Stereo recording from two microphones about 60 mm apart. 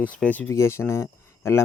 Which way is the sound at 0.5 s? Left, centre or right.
Left.